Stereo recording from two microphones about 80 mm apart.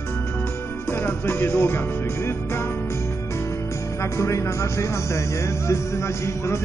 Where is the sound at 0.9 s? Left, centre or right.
Left.